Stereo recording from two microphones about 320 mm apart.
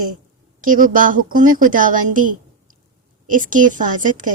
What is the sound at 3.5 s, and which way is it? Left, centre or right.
Speech, right.